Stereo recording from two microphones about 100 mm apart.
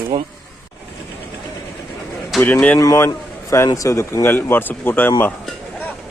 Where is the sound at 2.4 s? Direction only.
15° left (ahead or behind).